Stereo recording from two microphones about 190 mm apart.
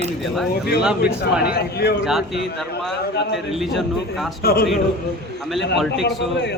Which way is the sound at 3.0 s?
60° left (ahead or behind).